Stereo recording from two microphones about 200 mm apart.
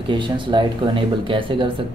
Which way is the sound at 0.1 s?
25° right (ahead or behind).